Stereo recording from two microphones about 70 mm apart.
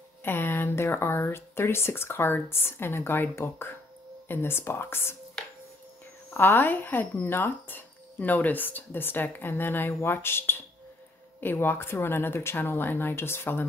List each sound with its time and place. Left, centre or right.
0.2 s speech: left
6.3 s speech: left